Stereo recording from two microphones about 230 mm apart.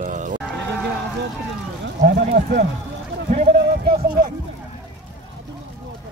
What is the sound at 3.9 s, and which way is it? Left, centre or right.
Speech, right.